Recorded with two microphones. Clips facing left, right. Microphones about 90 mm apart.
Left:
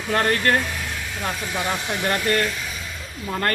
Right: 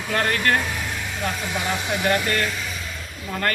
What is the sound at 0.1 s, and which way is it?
Speech, 30° left (ahead or behind).